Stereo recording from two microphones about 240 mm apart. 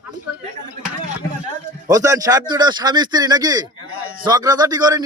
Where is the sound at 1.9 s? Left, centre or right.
Centre.